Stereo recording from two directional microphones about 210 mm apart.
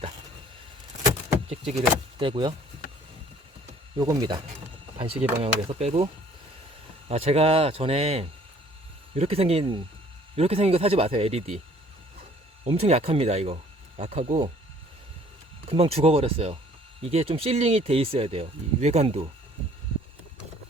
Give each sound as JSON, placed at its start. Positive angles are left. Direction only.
{"t": 1.5, "sound": "speech", "side_deg": -25}
{"t": 3.9, "sound": "speech", "side_deg": -20}
{"t": 7.1, "sound": "speech", "side_deg": -30}
{"t": 12.6, "sound": "speech", "side_deg": -30}
{"t": 15.6, "sound": "speech", "side_deg": -25}